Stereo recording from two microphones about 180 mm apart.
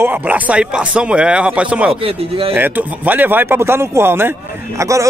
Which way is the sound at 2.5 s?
10° right (ahead or behind).